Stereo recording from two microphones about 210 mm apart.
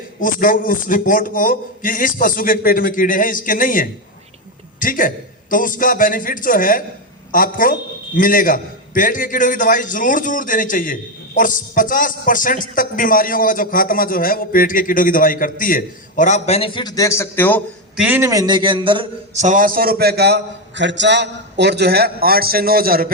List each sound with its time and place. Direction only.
0.2 s a man's voice: 40° left (ahead or behind); by 17.6 s 10° left (ahead or behind)
17.9 s a man's voice: 5° right (ahead or behind); by 19.5 s 25° right (ahead or behind)
19.5 s a man's voice: 40° right (ahead or behind)